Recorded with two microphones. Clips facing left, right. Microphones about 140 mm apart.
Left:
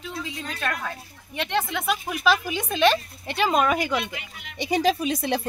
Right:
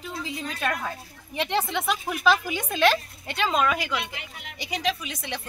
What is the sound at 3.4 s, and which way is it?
Speech, 15° left (ahead or behind).